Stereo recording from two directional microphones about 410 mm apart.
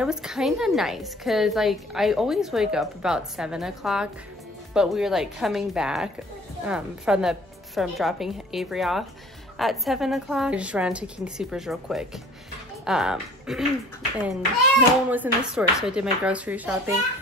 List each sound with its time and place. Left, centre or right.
0.0 s a woman's voice: centre
14.8 s a woman's voice: centre